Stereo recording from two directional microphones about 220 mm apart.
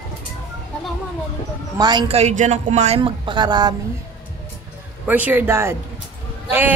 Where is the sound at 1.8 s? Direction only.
20° right (ahead or behind).